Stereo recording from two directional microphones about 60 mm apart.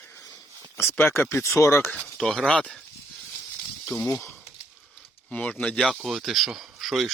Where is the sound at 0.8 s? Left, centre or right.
Left.